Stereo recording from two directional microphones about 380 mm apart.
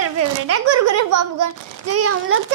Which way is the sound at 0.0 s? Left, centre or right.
Right.